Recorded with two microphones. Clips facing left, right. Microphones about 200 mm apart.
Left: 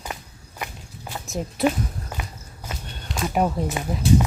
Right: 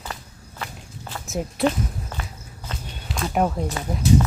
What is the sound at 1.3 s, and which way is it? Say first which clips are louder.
Speech: right 2 dB; centre (ahead or behind).